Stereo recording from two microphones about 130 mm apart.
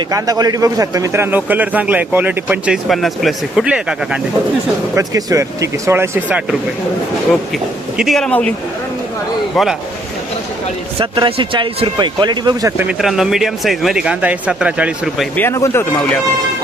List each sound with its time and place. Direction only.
0.1 s a man's voice: 25° right (ahead or behind)
2.7 s speech: centre (ahead or behind)
4.9 s speech: 25° right (ahead or behind); by 8.5 s 10° left (ahead or behind)
9.5 s speech: centre (ahead or behind)
10.9 s speech: 40° right (ahead or behind)
12.8 s speech: 5° right (ahead or behind)
15.4 s speech: 20° left (ahead or behind)